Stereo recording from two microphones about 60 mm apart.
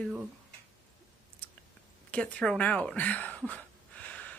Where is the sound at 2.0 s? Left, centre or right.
Left.